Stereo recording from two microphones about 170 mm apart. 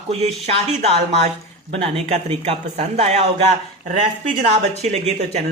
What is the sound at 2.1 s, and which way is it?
Speech, 40° right (ahead or behind).